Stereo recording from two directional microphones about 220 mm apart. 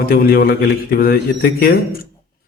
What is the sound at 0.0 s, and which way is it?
A man's voice, 45° left (ahead or behind).